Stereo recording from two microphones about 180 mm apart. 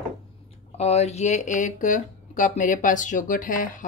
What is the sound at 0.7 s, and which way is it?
Speech, 35° left (ahead or behind).